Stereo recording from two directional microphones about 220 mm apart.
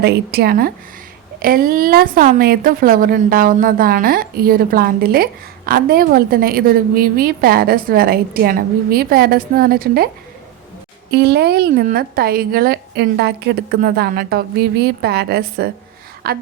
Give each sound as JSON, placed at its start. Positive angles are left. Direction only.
{"t": 0.0, "sound": "a woman's voice", "side_deg": -45}
{"t": 11.1, "sound": "a woman's voice", "side_deg": -45}